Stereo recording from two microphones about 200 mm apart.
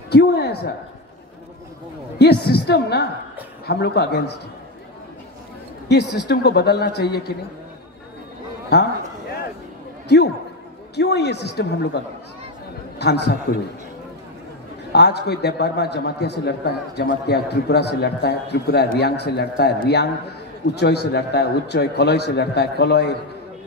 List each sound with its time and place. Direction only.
0.1 s a man's voice: 55° left (ahead or behind)
2.1 s a man's voice: 55° left (ahead or behind)
5.9 s speech: 55° left (ahead or behind)
8.7 s a man's voice: 55° left (ahead or behind)
10.0 s a man's voice: 55° left (ahead or behind)
13.0 s a man's voice: 55° left (ahead or behind)
14.9 s a man's voice: 55° left (ahead or behind)